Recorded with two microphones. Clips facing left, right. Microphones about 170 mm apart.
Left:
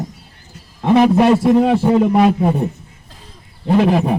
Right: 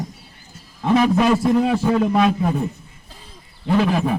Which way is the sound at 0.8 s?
25° left (ahead or behind).